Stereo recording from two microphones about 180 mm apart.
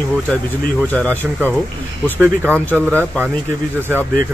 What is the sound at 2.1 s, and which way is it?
Speech, 10° right (ahead or behind).